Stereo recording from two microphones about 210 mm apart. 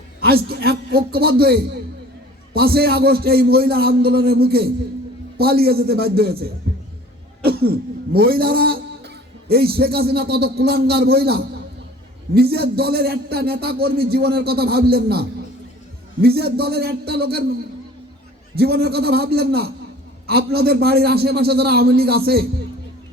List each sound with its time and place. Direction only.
0.2 s a man's voice: 45° right (ahead or behind)
2.5 s a man's voice: 45° right (ahead or behind)
18.5 s a man's voice: 50° right (ahead or behind)